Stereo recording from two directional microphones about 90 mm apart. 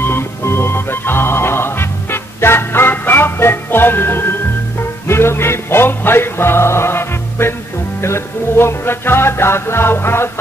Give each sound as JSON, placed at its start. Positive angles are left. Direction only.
{"t": 0.0, "sound": "music", "side_deg": 25}